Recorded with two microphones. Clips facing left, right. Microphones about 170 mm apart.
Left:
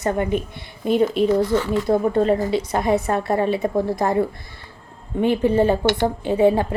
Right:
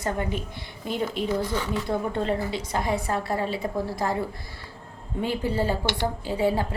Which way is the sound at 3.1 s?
55° left (ahead or behind).